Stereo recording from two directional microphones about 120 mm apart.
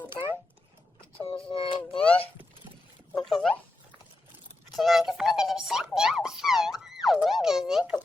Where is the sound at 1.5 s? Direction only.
45° left (ahead or behind).